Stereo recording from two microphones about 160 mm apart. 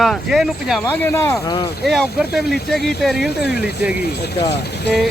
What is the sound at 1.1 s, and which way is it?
Speech, 15° left (ahead or behind).